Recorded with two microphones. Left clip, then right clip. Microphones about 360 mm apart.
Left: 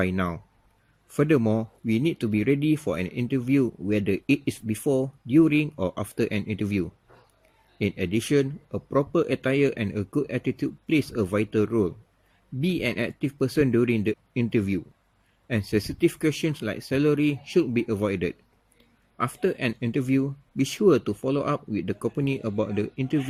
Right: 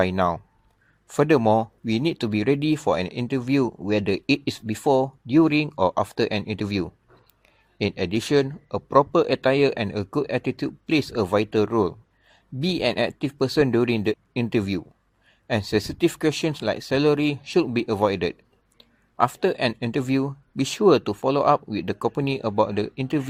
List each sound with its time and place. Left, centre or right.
0.0 s speech: centre
1.4 s speech: right
2.0 s speech: centre